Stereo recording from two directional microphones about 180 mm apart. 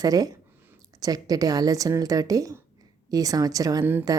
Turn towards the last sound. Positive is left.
turn(degrees=-15)  # may be behind; listen again after turning